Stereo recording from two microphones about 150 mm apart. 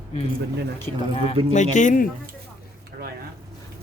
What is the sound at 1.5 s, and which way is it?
Speech, 55° left (ahead or behind).